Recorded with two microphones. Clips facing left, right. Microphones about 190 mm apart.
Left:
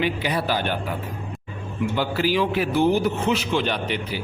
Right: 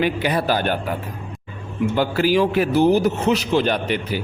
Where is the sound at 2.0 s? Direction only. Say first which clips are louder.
Right 4 dB; 50° right (ahead or behind).